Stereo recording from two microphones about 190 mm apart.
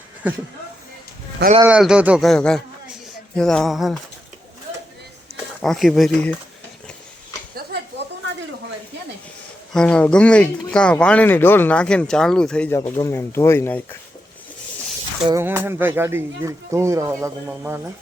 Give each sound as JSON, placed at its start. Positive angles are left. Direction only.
{"t": 1.6, "sound": "speech", "side_deg": -5}
{"t": 5.6, "sound": "speech", "side_deg": 0}
{"t": 9.7, "sound": "speech", "side_deg": 5}
{"t": 15.4, "sound": "speech", "side_deg": -10}